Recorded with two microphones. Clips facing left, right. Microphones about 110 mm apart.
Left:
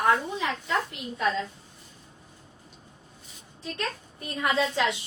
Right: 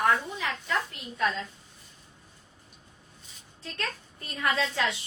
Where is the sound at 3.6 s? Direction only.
20° left (ahead or behind).